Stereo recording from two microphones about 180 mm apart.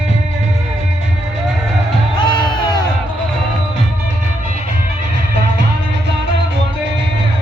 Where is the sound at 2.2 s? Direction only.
25° left (ahead or behind).